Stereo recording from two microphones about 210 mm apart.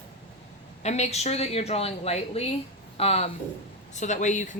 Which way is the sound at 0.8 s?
30° left (ahead or behind).